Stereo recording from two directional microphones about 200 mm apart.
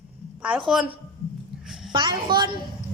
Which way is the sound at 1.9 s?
25° right (ahead or behind).